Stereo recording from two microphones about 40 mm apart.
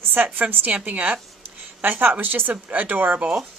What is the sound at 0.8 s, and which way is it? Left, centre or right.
Speech, right.